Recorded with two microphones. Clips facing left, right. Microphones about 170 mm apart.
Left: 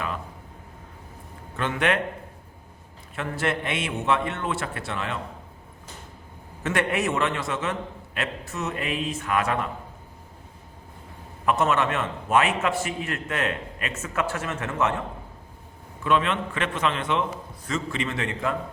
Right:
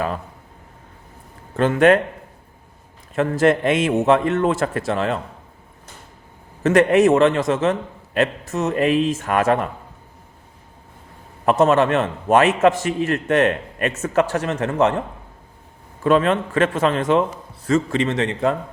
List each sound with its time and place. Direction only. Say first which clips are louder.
1.5 s a man's voice: right 11 dB; 40° right (ahead or behind)
3.2 s a man's voice: right 11 dB; 40° right (ahead or behind)
6.6 s a man's voice: right 11 dB; 40° right (ahead or behind)
11.4 s a man's voice: right 7 dB; 35° right (ahead or behind)
16.0 s a man's voice: right 7 dB; 40° right (ahead or behind)
18.0 s a man's voice: right 8 dB; 35° right (ahead or behind)